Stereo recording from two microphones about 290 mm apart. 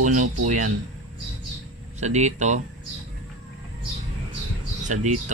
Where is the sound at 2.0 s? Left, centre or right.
Right.